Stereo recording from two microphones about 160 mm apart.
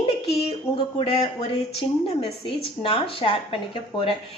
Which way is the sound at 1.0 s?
35° left (ahead or behind).